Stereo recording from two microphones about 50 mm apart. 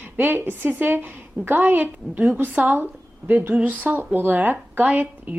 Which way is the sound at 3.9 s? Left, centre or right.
Right.